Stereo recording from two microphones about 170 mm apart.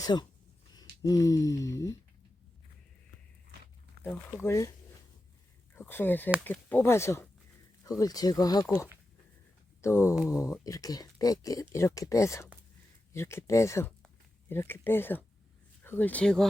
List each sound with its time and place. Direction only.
0.0 s speech: 25° left (ahead or behind)
4.0 s speech: 15° left (ahead or behind)
5.7 s speech: 10° left (ahead or behind)
8.6 s speech: 10° left (ahead or behind)